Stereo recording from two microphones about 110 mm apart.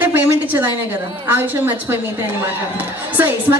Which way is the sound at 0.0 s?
15° right (ahead or behind).